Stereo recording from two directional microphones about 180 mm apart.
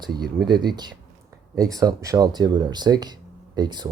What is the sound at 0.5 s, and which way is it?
Speech, 25° right (ahead or behind).